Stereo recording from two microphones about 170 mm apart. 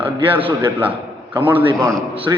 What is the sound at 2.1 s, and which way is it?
Speech, 30° right (ahead or behind).